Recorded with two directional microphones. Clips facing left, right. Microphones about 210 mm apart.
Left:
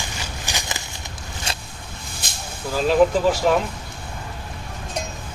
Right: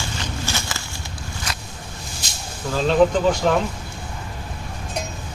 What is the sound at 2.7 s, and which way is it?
Speech, 5° left (ahead or behind).